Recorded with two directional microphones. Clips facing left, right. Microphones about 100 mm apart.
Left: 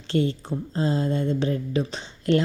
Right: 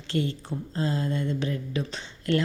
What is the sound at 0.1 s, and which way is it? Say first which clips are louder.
A woman's voice: left 5 dB; 30° left (ahead or behind).